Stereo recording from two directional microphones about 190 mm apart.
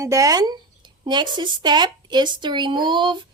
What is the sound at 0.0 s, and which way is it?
A woman's voice, 15° right (ahead or behind).